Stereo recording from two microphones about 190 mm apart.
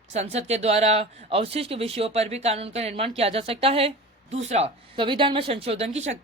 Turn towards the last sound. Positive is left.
turn(degrees=-35)  # may be behind; listen again after turning